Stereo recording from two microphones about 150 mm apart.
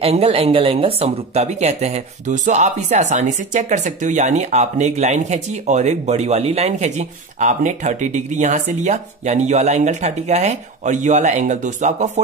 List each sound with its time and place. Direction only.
0.0 s speech: 40° right (ahead or behind)